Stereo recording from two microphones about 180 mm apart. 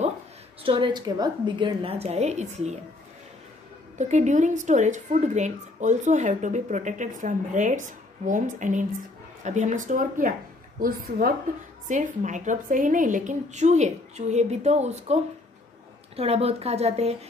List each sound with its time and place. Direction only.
0.7 s a woman's voice: 25° right (ahead or behind)
4.0 s a woman's voice: 40° right (ahead or behind)
11.9 s speech: 45° right (ahead or behind)
16.2 s a woman's voice: 35° right (ahead or behind)